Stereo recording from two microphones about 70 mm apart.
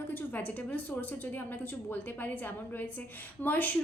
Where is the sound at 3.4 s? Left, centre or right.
Left.